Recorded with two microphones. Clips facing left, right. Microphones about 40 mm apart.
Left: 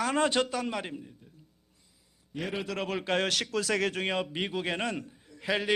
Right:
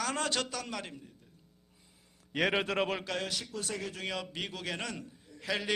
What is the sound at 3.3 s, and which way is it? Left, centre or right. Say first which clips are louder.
Speech: left 9 dB; left.